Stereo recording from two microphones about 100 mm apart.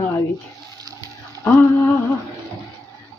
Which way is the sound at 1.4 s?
20° left (ahead or behind).